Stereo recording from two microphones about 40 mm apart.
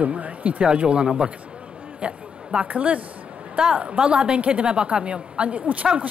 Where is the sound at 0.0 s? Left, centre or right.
Right.